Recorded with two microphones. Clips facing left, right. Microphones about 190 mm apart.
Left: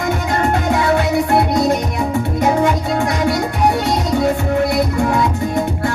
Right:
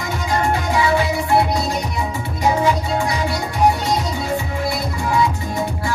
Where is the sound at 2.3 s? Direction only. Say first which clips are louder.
Left 1 dB; 55° left (ahead or behind).